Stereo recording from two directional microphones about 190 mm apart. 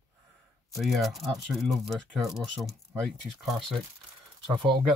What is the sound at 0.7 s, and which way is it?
Speech, centre (ahead or behind).